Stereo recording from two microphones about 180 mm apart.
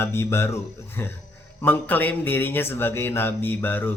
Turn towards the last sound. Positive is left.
turn(degrees=10)  # may be behind; listen again after turning